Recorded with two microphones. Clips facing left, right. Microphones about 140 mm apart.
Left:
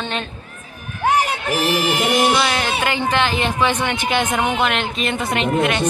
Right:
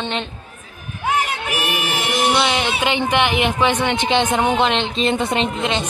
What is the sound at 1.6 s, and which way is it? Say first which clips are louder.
Mantra: left 7 dB; 40° left (ahead or behind).